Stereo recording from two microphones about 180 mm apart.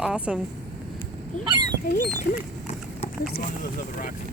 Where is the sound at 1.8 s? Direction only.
55° left (ahead or behind).